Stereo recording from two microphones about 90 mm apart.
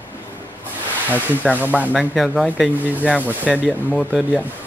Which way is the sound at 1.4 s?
15° right (ahead or behind).